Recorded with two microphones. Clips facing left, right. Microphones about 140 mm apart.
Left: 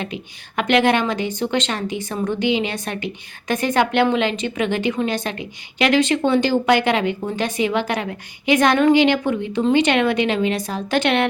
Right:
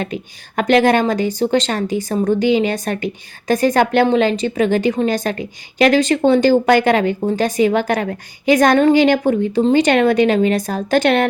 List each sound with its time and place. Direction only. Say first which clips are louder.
0.0 s a woman's voice: right 5 dB; 45° right (ahead or behind)